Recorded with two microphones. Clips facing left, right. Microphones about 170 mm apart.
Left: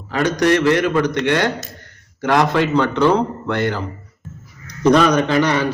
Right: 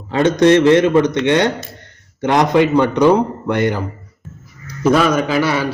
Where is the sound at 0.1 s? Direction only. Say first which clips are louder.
Right 5 dB; 25° right (ahead or behind).